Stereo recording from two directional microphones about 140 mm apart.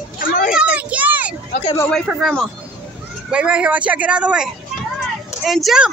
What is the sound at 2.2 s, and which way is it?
A woman's voice, 5° left (ahead or behind).